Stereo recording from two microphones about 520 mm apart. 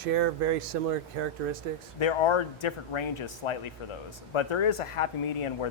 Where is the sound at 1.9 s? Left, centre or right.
Left.